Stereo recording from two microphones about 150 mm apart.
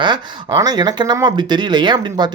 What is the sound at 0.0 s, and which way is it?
Speech, 25° right (ahead or behind).